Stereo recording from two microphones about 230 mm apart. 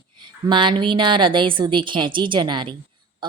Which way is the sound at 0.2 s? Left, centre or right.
Centre.